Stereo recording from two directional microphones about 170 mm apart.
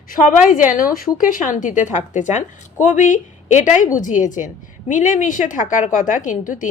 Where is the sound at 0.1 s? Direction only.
50° left (ahead or behind).